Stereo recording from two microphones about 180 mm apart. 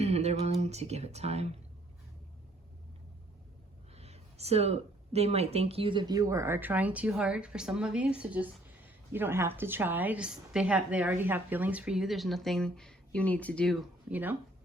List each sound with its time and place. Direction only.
0.0 s speech: 35° right (ahead or behind)
3.9 s a woman's voice: 35° right (ahead or behind); by 13.7 s 5° left (ahead or behind)
14.1 s speech: 10° right (ahead or behind)